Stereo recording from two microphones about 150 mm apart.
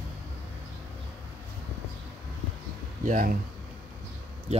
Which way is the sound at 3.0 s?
60° right (ahead or behind).